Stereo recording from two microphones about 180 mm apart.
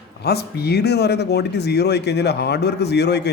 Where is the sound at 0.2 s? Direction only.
65° left (ahead or behind).